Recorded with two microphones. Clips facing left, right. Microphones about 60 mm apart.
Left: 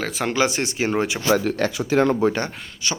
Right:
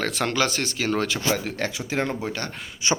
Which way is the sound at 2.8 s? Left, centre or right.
Right.